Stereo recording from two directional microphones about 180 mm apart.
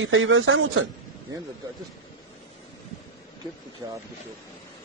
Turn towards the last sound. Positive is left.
turn(degrees=-15)  # may be behind; listen again after turning